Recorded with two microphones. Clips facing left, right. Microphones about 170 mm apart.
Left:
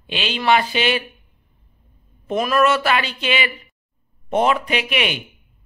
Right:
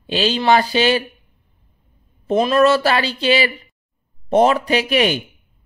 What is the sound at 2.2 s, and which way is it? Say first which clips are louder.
Speech: right 4 dB; 30° right (ahead or behind).